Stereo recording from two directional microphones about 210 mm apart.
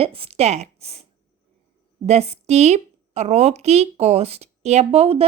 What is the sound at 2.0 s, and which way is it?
A woman's voice, 30° right (ahead or behind).